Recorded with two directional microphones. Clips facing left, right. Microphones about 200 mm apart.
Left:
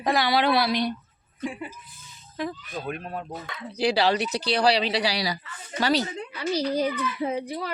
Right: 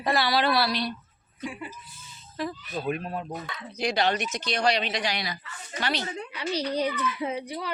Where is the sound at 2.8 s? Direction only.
5° right (ahead or behind).